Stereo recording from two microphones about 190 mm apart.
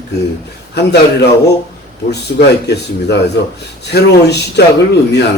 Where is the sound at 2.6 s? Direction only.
60° left (ahead or behind).